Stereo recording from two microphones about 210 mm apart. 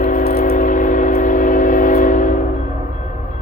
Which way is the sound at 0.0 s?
40° left (ahead or behind).